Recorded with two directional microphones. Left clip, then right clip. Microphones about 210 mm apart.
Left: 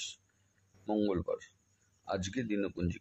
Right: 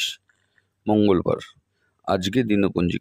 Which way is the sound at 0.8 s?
40° right (ahead or behind).